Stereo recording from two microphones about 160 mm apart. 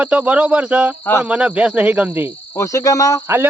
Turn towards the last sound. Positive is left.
turn(degrees=-15)  # may be behind; listen again after turning